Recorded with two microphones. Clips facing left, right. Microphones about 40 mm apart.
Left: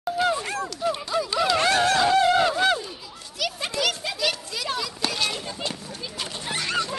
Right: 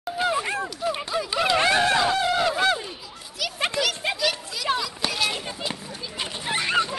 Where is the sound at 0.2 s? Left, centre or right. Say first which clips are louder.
Right 1 dB; centre.